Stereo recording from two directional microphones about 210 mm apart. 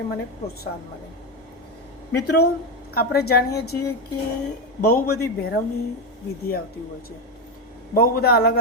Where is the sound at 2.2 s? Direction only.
50° left (ahead or behind).